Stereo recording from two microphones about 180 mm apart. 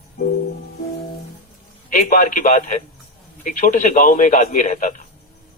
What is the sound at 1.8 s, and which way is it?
A man's voice, 45° left (ahead or behind).